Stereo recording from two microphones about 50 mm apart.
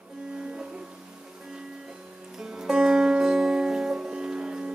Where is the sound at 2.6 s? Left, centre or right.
Centre.